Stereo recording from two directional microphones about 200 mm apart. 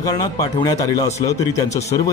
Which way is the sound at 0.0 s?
20° left (ahead or behind).